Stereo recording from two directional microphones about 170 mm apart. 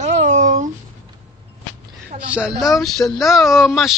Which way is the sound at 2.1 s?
40° right (ahead or behind).